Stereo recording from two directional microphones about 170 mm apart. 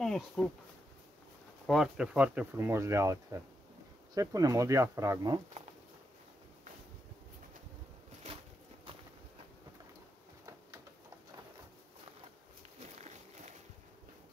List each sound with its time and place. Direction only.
0.0 s speech: 5° left (ahead or behind)
1.7 s speech: 5° right (ahead or behind); by 5.4 s 20° right (ahead or behind)